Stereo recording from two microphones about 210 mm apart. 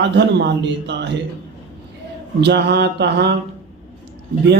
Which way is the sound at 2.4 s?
55° right (ahead or behind).